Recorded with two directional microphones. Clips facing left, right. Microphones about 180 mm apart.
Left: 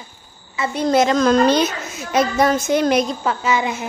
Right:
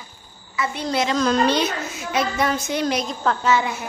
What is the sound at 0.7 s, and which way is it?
A woman's voice, 45° left (ahead or behind).